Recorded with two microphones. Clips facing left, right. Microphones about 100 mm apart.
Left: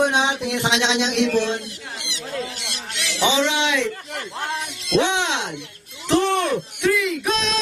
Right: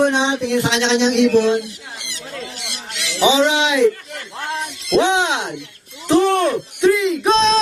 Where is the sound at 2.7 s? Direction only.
5° right (ahead or behind).